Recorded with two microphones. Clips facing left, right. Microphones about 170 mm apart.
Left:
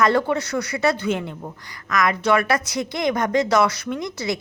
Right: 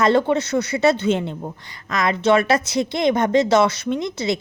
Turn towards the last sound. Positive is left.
turn(degrees=-25)  # may be behind; listen again after turning